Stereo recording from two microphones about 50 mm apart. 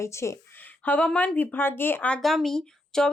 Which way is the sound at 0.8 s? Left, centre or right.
Left.